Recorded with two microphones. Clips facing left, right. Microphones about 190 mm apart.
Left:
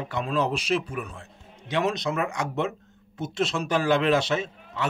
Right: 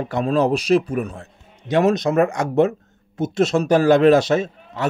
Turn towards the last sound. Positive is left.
turn(degrees=-40)  # may be behind; listen again after turning